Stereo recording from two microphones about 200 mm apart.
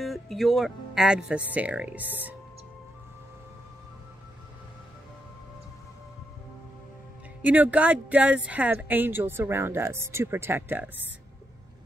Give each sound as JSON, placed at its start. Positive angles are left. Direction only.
{"t": 0.0, "sound": "speech", "side_deg": 0}
{"t": 7.4, "sound": "speech", "side_deg": -10}